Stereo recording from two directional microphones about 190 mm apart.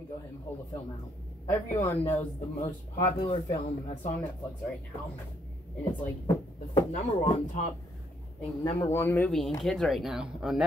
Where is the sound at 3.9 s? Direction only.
40° left (ahead or behind).